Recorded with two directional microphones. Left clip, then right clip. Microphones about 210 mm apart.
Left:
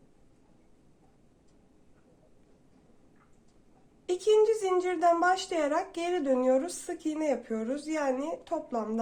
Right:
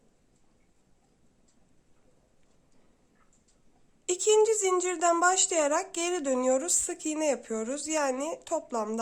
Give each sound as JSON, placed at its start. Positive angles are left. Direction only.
{"t": 4.0, "sound": "a woman's voice", "side_deg": -25}